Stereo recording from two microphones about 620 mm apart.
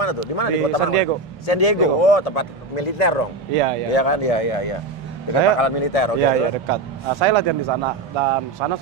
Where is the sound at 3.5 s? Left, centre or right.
Right.